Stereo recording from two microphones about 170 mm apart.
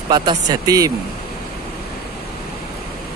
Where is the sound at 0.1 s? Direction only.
25° right (ahead or behind).